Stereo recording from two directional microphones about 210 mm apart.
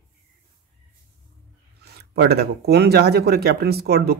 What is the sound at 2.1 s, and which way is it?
A man's voice, 50° right (ahead or behind).